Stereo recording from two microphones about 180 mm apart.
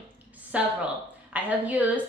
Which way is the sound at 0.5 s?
5° right (ahead or behind).